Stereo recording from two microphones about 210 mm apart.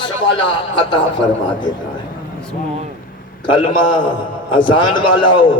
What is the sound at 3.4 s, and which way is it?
A man's voice, 25° left (ahead or behind).